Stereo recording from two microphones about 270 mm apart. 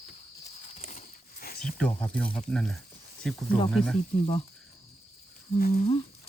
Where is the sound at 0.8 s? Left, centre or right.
Left.